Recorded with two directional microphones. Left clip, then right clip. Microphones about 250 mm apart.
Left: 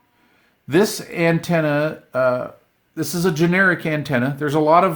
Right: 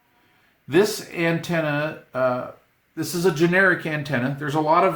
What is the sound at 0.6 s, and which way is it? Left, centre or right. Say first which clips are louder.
Speech: left 2 dB; left.